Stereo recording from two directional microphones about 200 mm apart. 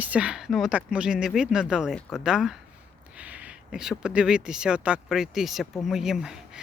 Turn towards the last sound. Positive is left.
turn(degrees=-5)  # may be behind; listen again after turning